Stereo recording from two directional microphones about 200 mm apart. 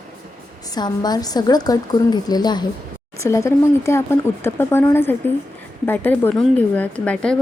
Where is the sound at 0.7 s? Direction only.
20° left (ahead or behind).